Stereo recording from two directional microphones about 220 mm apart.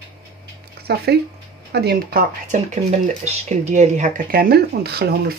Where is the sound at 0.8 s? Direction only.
45° right (ahead or behind).